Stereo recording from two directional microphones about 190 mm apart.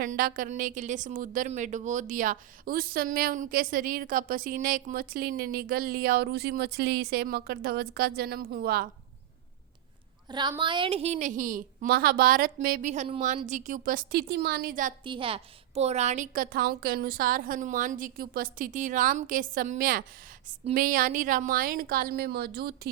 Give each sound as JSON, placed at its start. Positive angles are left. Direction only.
{"t": 0.0, "sound": "a woman's voice", "side_deg": -45}
{"t": 10.2, "sound": "a woman's voice", "side_deg": -25}
{"t": 15.0, "sound": "a woman's voice", "side_deg": -25}